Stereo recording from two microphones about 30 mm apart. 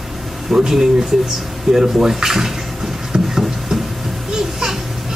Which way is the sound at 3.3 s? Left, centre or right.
Centre.